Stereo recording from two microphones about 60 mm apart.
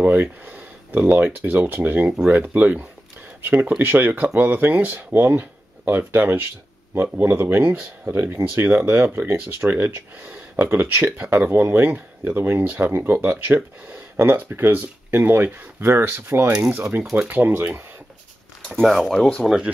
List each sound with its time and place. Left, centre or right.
0.0 s speech: right
18.9 s speech: centre